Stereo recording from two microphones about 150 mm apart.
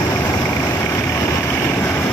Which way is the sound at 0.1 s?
20° left (ahead or behind).